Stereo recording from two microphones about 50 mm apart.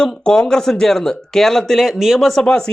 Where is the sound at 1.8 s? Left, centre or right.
Centre.